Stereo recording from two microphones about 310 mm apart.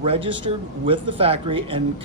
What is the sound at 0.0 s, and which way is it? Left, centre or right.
Speech, centre.